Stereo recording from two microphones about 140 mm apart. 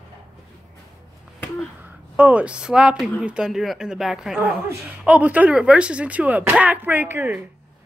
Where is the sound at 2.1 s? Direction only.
10° right (ahead or behind).